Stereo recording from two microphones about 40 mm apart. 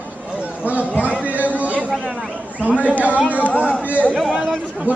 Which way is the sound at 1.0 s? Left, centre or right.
Right.